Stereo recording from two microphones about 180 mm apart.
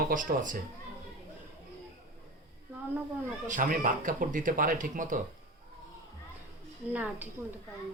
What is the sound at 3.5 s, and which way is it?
Speech, 50° right (ahead or behind).